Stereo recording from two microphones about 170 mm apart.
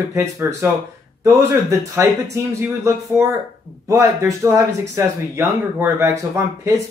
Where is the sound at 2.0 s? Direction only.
20° right (ahead or behind).